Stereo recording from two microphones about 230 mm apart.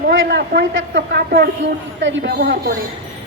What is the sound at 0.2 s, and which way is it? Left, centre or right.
A woman's voice, right.